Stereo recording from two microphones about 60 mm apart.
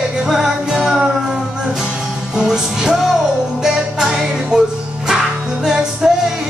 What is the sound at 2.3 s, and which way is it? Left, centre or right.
Music, centre.